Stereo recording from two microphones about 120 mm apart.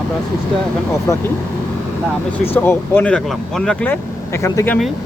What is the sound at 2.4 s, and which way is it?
Speech, 20° left (ahead or behind).